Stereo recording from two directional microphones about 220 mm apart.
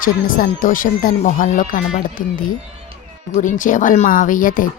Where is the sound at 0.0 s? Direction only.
40° left (ahead or behind).